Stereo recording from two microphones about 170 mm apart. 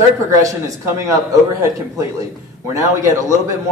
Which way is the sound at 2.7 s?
20° right (ahead or behind).